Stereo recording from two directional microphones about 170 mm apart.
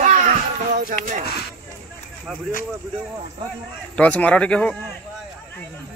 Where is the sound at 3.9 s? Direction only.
5° left (ahead or behind).